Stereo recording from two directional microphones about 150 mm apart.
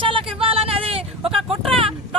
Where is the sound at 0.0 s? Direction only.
35° right (ahead or behind).